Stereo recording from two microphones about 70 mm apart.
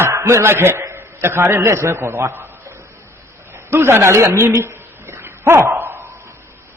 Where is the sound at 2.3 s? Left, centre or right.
Right.